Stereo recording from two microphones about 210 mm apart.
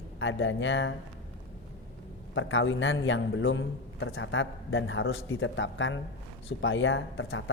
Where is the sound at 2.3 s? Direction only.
65° left (ahead or behind).